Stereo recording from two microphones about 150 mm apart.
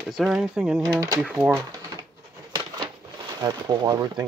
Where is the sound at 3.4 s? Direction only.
25° right (ahead or behind).